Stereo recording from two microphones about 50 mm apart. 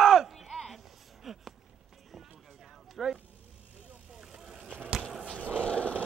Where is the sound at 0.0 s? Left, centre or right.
Centre.